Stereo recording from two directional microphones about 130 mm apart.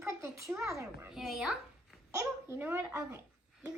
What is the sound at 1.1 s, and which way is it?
Speech, 5° right (ahead or behind).